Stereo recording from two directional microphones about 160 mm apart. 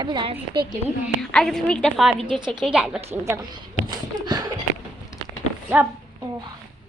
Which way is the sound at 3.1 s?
15° right (ahead or behind).